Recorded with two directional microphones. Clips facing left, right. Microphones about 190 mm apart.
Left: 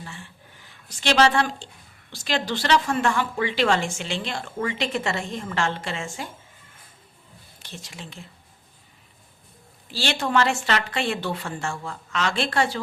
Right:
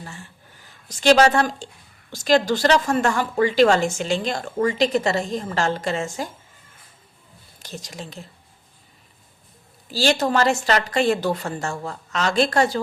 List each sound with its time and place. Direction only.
0.0 s a woman's voice: 40° right (ahead or behind)
7.6 s speech: 40° right (ahead or behind)
9.9 s speech: 40° right (ahead or behind)